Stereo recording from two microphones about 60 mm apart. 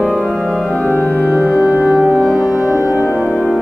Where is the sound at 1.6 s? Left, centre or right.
Right.